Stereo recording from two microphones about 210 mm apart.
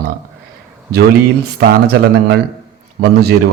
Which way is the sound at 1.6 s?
50° right (ahead or behind).